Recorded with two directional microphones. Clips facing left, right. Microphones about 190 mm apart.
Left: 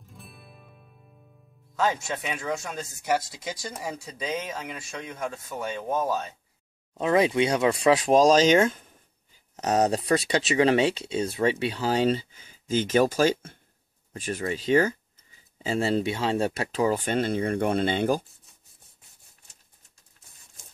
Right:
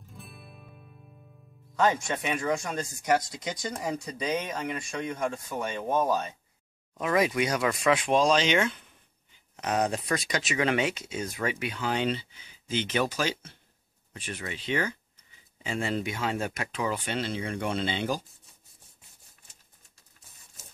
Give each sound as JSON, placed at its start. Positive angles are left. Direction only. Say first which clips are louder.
{"t": 0.0, "sound": "music", "louder": "right 1 dB", "side_deg": 0}
{"t": 1.8, "sound": "speech", "louder": "right 1 dB", "side_deg": 0}
{"t": 6.9, "sound": "speech", "louder": "left 4 dB", "side_deg": 25}